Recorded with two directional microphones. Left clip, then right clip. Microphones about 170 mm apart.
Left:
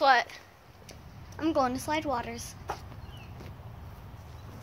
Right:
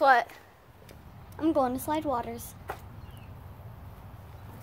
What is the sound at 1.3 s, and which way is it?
A woman's voice, 30° right (ahead or behind).